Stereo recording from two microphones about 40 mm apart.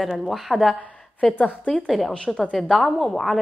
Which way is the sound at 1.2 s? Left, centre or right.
Left.